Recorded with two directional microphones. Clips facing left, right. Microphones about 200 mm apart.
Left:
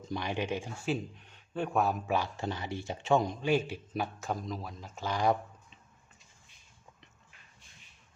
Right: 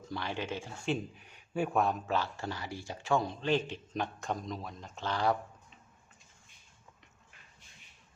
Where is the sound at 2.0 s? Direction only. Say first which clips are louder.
Left 2 dB; 15° left (ahead or behind).